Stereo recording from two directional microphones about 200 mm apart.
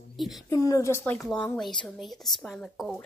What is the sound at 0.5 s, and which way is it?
A woman's voice, 15° left (ahead or behind).